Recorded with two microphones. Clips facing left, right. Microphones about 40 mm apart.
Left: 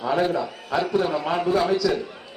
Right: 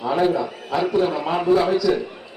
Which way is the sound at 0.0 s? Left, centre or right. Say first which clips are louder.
Right 3 dB; centre.